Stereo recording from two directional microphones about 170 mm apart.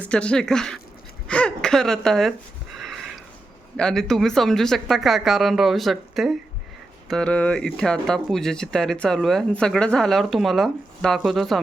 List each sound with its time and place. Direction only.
0.0 s speech: 5° left (ahead or behind)
2.7 s sniff: centre (ahead or behind)
3.8 s speech: 5° left (ahead or behind)